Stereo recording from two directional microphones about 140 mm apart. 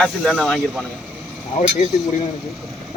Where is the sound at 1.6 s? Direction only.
55° left (ahead or behind).